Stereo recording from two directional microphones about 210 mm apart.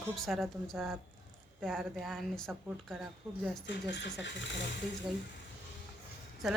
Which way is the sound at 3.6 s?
55° left (ahead or behind).